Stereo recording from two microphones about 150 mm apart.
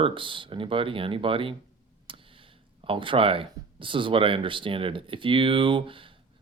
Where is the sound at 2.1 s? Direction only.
35° right (ahead or behind).